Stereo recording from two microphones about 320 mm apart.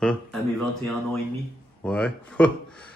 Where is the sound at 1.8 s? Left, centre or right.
Centre.